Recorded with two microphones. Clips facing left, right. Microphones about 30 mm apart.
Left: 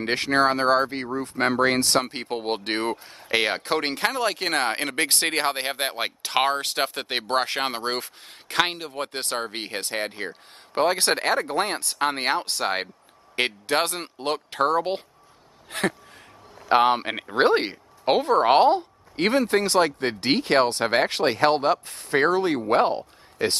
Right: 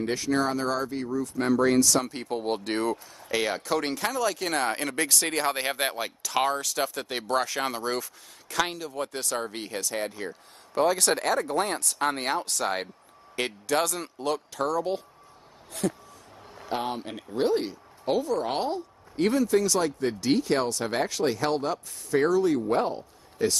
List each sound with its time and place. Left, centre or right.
0.0 s speech: left
15.7 s speech: left